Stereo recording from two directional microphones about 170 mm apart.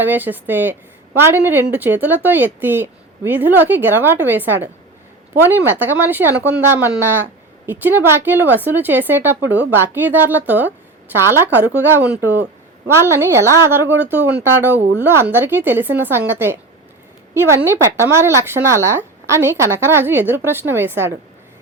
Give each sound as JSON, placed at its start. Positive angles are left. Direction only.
{"t": 0.0, "sound": "a woman's voice", "side_deg": -10}